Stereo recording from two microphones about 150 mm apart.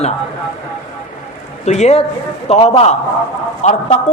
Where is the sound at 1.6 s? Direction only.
50° left (ahead or behind).